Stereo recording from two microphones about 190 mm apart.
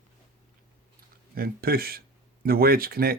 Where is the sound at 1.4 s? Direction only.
55° right (ahead or behind).